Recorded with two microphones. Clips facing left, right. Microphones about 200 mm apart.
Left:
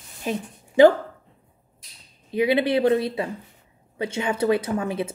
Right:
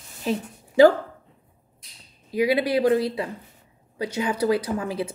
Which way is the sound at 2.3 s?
25° left (ahead or behind).